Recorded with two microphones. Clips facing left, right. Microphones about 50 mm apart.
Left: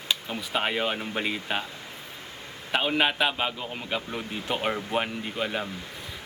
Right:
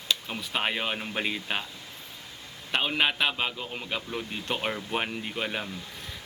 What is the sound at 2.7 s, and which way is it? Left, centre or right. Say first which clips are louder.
A man's voice: left 2 dB; centre.